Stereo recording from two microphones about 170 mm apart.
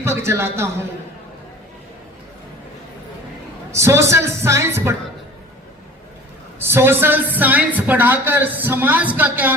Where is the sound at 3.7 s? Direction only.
15° right (ahead or behind).